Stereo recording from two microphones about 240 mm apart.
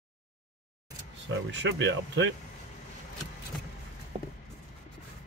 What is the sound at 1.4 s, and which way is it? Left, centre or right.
Speech, right.